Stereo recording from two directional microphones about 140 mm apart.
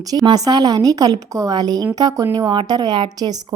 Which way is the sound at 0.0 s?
25° right (ahead or behind).